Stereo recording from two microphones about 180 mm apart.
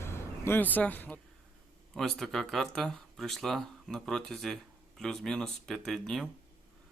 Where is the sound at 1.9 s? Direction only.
Centre (ahead or behind).